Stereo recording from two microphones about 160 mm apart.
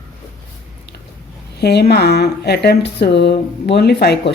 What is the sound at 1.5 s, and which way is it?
Speech, 85° left.